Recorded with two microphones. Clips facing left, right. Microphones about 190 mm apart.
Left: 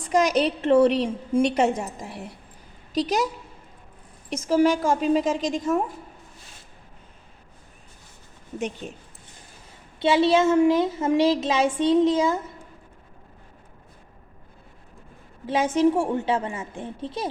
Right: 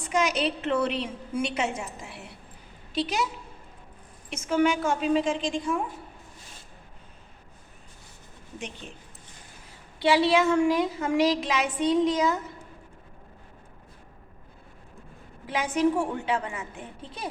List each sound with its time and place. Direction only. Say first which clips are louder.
0.1 s a woman's voice: left 5 dB; 40° left (ahead or behind)
4.3 s a woman's voice: left 4 dB; 35° left (ahead or behind)
10.0 s speech: left 3 dB; 25° left (ahead or behind)
15.4 s speech: left 4 dB; 25° left (ahead or behind)